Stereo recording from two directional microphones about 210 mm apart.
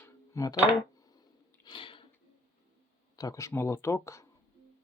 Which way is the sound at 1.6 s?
25° left (ahead or behind).